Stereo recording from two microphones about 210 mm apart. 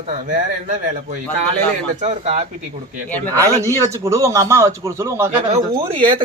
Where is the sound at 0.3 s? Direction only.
40° right (ahead or behind).